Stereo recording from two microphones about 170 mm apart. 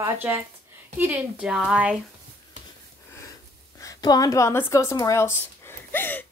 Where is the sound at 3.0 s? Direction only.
15° left (ahead or behind).